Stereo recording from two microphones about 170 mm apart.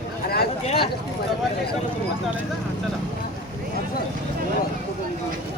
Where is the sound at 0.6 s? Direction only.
35° left (ahead or behind).